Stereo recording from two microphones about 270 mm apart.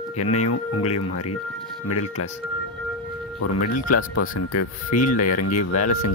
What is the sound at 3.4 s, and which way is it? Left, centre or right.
Speech, left.